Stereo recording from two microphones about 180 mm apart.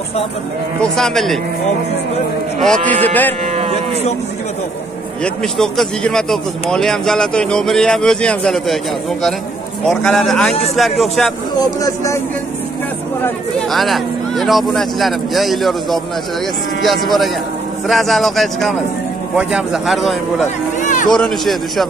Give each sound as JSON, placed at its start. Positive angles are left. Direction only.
{"t": 0.7, "sound": "a man's voice", "side_deg": 5}
{"t": 2.9, "sound": "speech", "side_deg": 10}
{"t": 3.5, "sound": "moo", "side_deg": -35}
{"t": 5.2, "sound": "a man's voice", "side_deg": 5}
{"t": 9.8, "sound": "a man's voice", "side_deg": 0}
{"t": 11.5, "sound": "speech", "side_deg": 20}
{"t": 13.2, "sound": "a man's voice", "side_deg": 5}
{"t": 20.4, "sound": "a sound", "side_deg": 45}
{"t": 21.1, "sound": "a man's voice", "side_deg": 0}